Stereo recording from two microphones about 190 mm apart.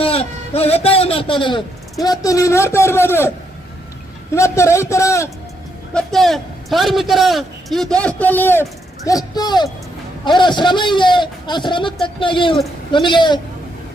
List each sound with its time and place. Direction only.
0.0 s a man's voice: 30° left (ahead or behind); by 3.3 s 10° left (ahead or behind)
4.4 s a man's voice: 15° left (ahead or behind)
5.9 s a man's voice: 5° left (ahead or behind); by 13.4 s 25° left (ahead or behind)